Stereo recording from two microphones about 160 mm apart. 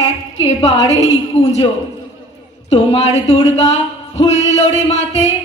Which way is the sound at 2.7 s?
40° left (ahead or behind).